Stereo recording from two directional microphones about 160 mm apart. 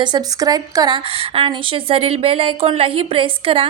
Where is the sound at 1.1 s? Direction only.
35° right (ahead or behind).